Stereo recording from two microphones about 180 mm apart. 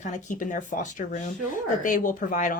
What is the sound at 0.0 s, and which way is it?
Speech, 45° left (ahead or behind).